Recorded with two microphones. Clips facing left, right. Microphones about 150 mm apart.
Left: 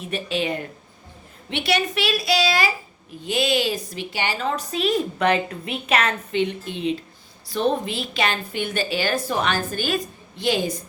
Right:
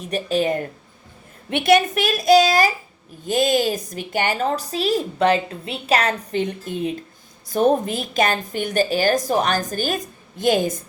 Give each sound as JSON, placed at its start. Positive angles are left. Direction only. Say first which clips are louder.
{"t": 0.0, "sound": "a woman's voice", "louder": "right 4 dB", "side_deg": -40}